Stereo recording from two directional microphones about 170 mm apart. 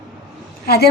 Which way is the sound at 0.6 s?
70° left (ahead or behind).